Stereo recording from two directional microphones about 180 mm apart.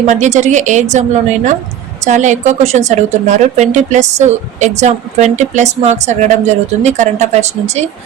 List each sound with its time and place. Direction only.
0.0 s a woman's voice: 40° right (ahead or behind)